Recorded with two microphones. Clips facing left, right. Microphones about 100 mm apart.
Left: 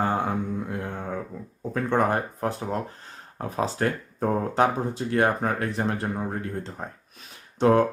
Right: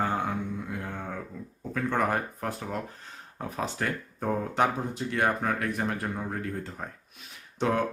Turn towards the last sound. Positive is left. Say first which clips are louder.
# left 8 dB
turn(degrees=35)  # may be behind; listen again after turning